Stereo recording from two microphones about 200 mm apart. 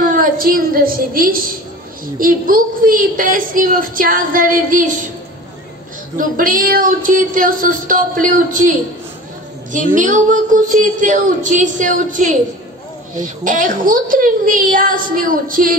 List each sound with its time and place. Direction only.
0.0 s a woman's voice: 40° right (ahead or behind)
6.1 s a woman's voice: 45° right (ahead or behind)